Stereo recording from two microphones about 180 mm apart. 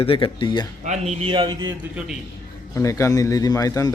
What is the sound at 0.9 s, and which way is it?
Speech, 35° right (ahead or behind).